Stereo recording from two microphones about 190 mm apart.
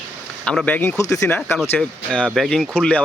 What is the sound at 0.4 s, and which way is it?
Speech, 5° left (ahead or behind).